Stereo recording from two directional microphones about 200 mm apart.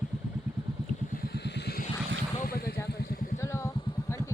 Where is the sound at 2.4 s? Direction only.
50° left (ahead or behind).